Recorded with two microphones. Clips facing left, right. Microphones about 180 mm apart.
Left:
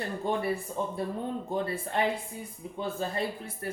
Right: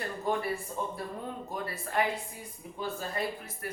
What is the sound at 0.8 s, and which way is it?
Speech, 25° left (ahead or behind).